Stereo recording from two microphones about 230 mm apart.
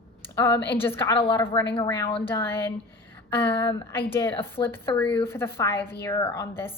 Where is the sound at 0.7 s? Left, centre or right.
Centre.